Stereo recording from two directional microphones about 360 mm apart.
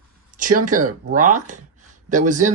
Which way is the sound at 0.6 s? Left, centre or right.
Right.